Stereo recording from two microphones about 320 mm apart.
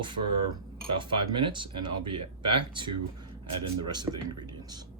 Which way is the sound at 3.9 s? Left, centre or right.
Centre.